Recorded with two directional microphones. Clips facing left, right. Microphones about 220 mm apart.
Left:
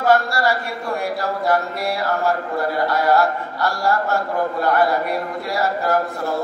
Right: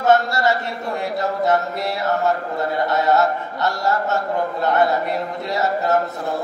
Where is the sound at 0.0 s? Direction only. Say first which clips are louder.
Right 1 dB; 20° right (ahead or behind).